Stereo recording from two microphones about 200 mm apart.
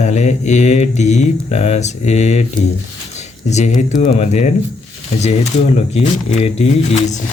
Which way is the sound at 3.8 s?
35° left (ahead or behind).